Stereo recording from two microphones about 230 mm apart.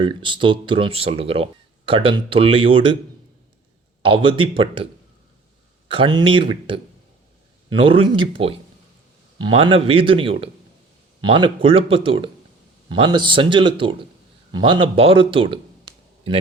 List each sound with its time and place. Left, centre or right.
0.0 s speech: right
4.0 s speech: right
5.9 s a man's voice: right